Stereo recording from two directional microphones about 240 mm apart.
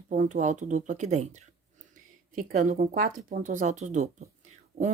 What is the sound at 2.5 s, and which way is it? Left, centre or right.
Speech, right.